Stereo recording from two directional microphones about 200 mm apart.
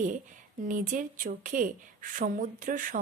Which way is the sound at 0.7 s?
40° right (ahead or behind).